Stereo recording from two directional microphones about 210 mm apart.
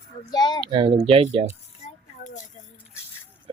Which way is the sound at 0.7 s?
25° right (ahead or behind).